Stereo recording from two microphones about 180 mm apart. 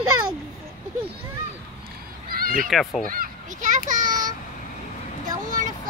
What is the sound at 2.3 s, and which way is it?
Cat, 55° right (ahead or behind).